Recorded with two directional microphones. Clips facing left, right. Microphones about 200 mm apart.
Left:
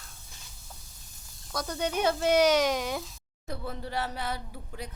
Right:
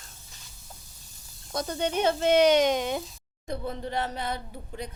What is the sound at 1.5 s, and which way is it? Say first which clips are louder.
Speech: right 2 dB; 25° right (ahead or behind).